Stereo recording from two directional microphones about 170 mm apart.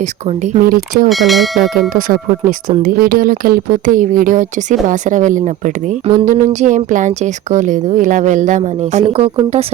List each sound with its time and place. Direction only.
0.0 s speech: 40° right (ahead or behind)
0.6 s speech: 55° right (ahead or behind)
1.1 s speech: centre (ahead or behind)
1.9 s a woman's voice: 55° right (ahead or behind); by 9.6 s 35° right (ahead or behind)